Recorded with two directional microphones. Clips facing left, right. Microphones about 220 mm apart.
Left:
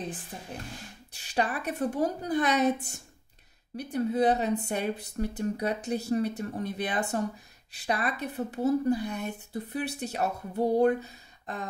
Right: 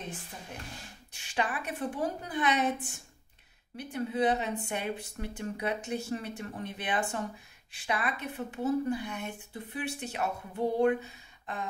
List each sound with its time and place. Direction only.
1.1 s speech: 35° left (ahead or behind)